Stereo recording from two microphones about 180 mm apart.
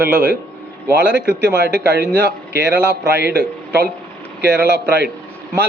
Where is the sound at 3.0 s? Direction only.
60° right (ahead or behind).